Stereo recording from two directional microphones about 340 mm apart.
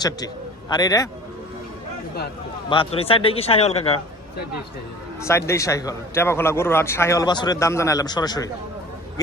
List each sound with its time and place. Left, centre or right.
0.7 s a man's voice: centre
2.6 s a man's voice: centre
5.2 s a man's voice: centre